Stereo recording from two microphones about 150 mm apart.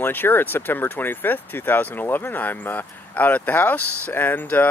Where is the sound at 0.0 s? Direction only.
15° left (ahead or behind).